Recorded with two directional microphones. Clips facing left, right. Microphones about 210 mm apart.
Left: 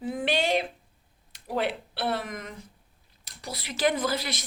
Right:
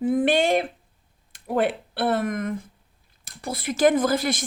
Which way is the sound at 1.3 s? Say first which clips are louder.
Right 6 dB; 50° right (ahead or behind).